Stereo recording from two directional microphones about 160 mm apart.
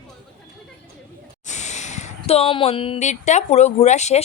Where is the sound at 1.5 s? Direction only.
45° left (ahead or behind).